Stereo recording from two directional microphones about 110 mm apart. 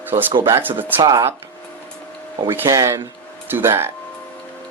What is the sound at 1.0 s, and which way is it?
Speech, 35° right (ahead or behind).